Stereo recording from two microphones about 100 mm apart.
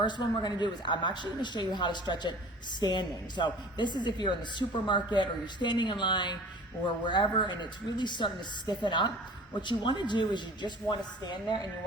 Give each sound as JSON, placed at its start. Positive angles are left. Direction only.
{"t": 0.0, "sound": "speech", "side_deg": 50}